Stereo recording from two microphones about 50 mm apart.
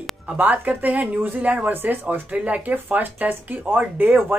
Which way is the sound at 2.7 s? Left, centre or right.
Right.